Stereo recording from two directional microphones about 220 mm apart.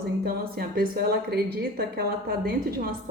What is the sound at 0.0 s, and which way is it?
A woman's voice, 45° right (ahead or behind).